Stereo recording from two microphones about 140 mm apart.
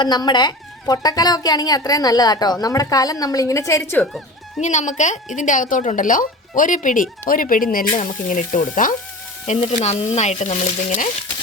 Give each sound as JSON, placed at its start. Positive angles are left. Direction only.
{"t": 0.0, "sound": "speech", "side_deg": 30}
{"t": 4.6, "sound": "a woman's voice", "side_deg": 60}
{"t": 9.6, "sound": "speech", "side_deg": 50}